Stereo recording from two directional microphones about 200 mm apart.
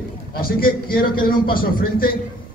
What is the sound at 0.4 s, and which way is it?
A man's voice, 45° left (ahead or behind).